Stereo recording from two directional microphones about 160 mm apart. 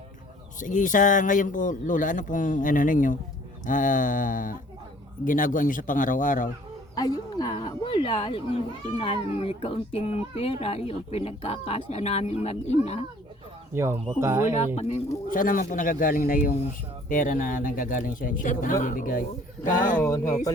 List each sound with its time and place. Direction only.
0.6 s speech: 55° left (ahead or behind)
6.9 s a sound: 25° left (ahead or behind)
8.9 s speech: 35° left (ahead or behind)
13.7 s speech: 15° right (ahead or behind)
14.8 s speech: 40° left (ahead or behind)
15.3 s speech: 60° left (ahead or behind)
20.1 s speech: 20° left (ahead or behind)